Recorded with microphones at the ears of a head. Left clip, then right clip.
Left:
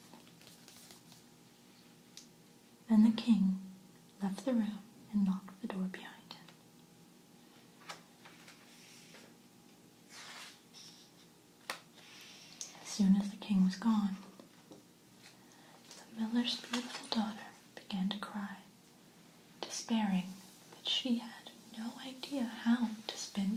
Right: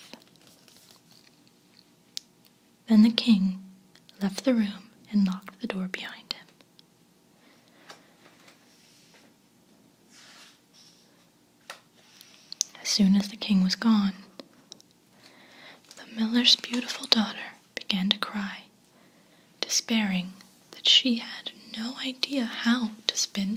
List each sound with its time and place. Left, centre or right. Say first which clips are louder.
2.8 s a woman's voice: right 9 dB; right
12.5 s whispering: right 19 dB; right
19.5 s speech: right 11 dB; right